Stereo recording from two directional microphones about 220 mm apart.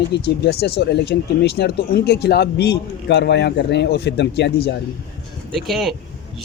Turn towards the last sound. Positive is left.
turn(degrees=0)  # may be behind; listen again after turning